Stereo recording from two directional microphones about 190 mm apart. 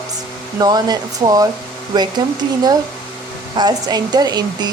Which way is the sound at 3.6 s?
20° right (ahead or behind).